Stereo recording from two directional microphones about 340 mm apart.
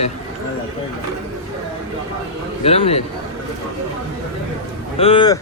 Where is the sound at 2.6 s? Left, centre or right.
Centre.